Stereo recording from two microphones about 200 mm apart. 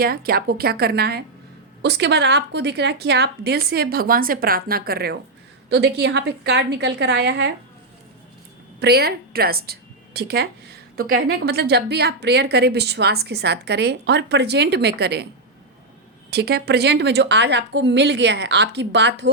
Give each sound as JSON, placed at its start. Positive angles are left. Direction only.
{"t": 0.0, "sound": "a woman's voice", "side_deg": -50}
{"t": 8.8, "sound": "a woman's voice", "side_deg": -50}
{"t": 16.3, "sound": "a woman's voice", "side_deg": -55}